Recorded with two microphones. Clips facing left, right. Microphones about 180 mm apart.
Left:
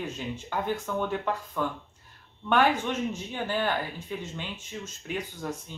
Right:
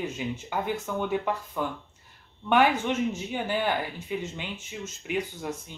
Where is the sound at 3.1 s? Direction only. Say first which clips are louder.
Right 1 dB; 15° right (ahead or behind).